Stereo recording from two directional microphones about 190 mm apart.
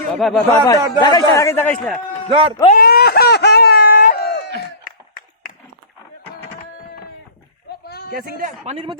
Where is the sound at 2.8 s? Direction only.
55° left (ahead or behind).